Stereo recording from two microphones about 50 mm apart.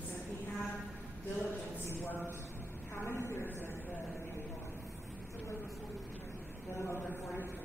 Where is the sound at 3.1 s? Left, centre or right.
Left.